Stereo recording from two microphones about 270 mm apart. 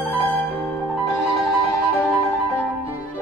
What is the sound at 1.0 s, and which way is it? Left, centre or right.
Music, left.